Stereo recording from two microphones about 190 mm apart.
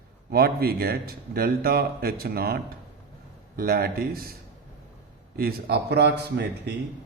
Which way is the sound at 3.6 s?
50° right (ahead or behind).